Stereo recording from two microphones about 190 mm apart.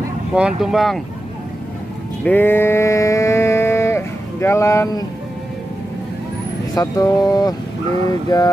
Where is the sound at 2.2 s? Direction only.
10° left (ahead or behind).